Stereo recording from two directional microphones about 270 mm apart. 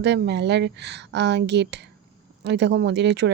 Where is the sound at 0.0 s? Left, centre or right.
Right.